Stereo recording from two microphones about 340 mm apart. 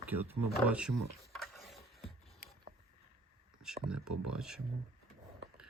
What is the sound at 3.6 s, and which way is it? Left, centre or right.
Speech, centre.